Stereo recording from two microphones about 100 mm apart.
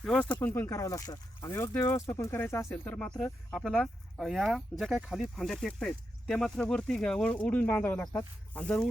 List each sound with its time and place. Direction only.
0.0 s snake: 10° left (ahead or behind)
0.4 s speech: 20° left (ahead or behind)
3.5 s speech: 5° left (ahead or behind)